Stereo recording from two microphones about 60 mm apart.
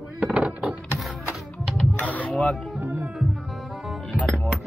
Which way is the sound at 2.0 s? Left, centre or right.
Left.